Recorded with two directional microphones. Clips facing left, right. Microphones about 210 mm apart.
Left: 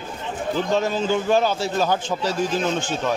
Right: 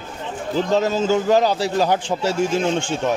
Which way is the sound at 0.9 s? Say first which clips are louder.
Right 3 dB; 40° right (ahead or behind).